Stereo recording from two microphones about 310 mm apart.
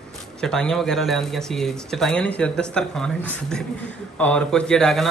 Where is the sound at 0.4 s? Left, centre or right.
Centre.